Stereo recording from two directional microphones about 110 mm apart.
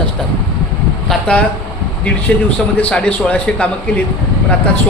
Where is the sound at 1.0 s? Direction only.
10° left (ahead or behind).